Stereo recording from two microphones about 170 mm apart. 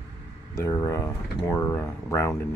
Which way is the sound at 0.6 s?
20° left (ahead or behind).